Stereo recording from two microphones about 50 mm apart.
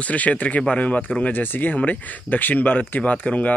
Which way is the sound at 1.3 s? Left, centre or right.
Left.